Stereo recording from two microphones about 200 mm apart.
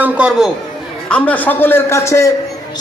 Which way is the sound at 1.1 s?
5° left (ahead or behind).